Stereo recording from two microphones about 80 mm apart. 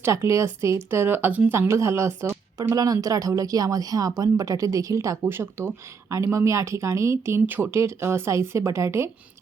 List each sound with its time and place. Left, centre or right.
0.0 s speech: right
2.7 s a woman's voice: right
5.2 s speech: right